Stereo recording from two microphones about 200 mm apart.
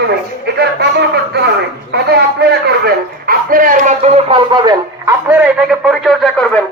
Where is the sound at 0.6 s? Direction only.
55° right (ahead or behind).